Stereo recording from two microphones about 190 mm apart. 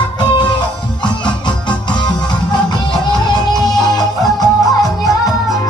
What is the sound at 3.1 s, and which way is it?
Music, 20° left (ahead or behind).